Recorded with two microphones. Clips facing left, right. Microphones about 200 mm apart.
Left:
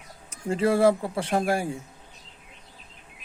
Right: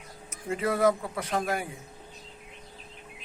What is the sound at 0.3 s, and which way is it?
A man's voice, 30° left (ahead or behind).